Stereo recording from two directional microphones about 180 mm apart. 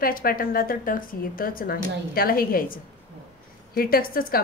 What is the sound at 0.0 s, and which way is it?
A woman's voice, 55° left (ahead or behind).